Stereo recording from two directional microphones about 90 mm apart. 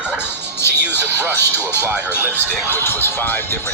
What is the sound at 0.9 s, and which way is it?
Speech, 25° left (ahead or behind).